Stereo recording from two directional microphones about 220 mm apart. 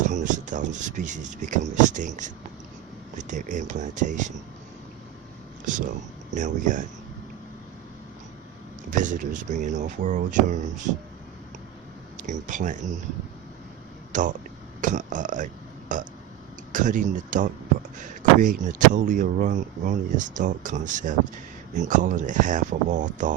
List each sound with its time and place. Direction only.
0.1 s speech: 35° right (ahead or behind)
6.3 s speech: 35° right (ahead or behind)
8.9 s speech: 35° right (ahead or behind)
12.1 s speech: 35° right (ahead or behind)
14.1 s speech: 35° right (ahead or behind)